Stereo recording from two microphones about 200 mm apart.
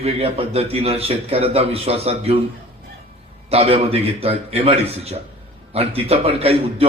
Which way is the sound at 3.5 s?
30° right (ahead or behind).